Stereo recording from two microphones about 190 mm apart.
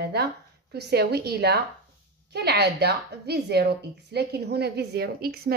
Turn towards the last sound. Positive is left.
turn(degrees=-50)  # may be behind; listen again after turning